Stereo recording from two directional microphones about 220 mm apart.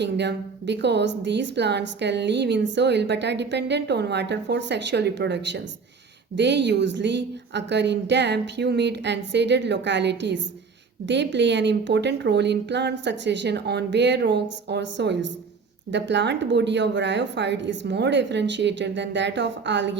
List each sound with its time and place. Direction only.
0.0 s a woman's voice: 50° right (ahead or behind)